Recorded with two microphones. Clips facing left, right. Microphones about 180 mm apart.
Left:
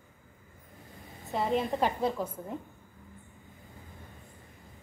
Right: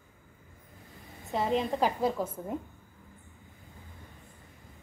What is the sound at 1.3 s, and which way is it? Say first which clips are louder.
A woman's voice: even; centre (ahead or behind).